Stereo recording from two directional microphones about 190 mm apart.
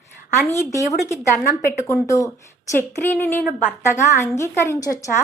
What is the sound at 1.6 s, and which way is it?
A woman's voice, 15° left (ahead or behind).